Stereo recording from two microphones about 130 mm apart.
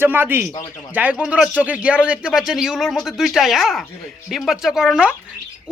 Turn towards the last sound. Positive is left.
turn(degrees=-5)  # may be behind; listen again after turning